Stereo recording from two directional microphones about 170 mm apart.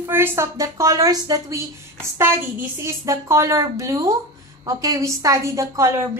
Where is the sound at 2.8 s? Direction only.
15° right (ahead or behind).